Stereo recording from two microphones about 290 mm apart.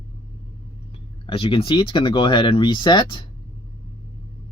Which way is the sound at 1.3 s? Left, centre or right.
Centre.